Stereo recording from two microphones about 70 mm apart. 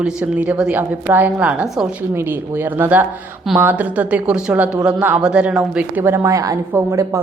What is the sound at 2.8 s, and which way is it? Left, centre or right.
Speech, right.